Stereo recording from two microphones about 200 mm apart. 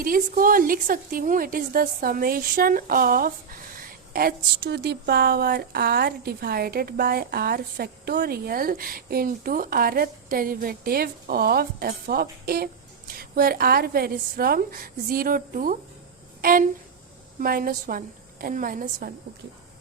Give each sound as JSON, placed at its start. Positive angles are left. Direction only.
{"t": 0.0, "sound": "a woman's voice", "side_deg": -45}
{"t": 16.4, "sound": "a sound", "side_deg": -45}
{"t": 17.4, "sound": "a woman's voice", "side_deg": -45}